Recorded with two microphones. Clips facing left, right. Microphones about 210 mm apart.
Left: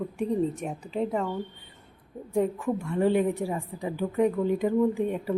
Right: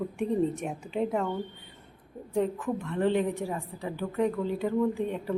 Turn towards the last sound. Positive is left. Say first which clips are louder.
# left 3 dB
turn(degrees=15)  # may be behind; listen again after turning